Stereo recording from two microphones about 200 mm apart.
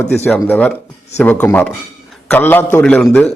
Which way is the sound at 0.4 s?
10° left (ahead or behind).